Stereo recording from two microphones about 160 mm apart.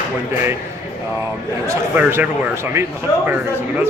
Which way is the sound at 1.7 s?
15° right (ahead or behind).